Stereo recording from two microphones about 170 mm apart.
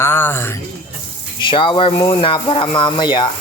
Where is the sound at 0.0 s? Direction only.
15° left (ahead or behind).